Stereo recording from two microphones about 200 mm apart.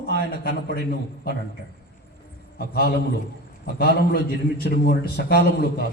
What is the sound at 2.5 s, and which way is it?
A man's voice, 50° left (ahead or behind).